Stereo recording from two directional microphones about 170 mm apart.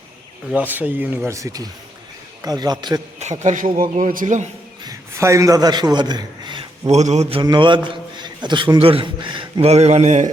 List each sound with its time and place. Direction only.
0.5 s a man's voice: 10° right (ahead or behind)
3.4 s a man's voice: 45° right (ahead or behind)
4.8 s a man's voice: 20° right (ahead or behind); by 7.4 s 35° right (ahead or behind)
7.4 s a man's voice: 25° right (ahead or behind); by 10.2 s 40° right (ahead or behind)